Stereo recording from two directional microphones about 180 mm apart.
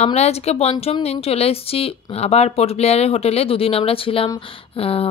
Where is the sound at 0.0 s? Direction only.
35° left (ahead or behind).